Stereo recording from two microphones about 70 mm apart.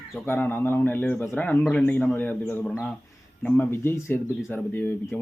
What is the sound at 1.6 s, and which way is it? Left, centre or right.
Speech, centre.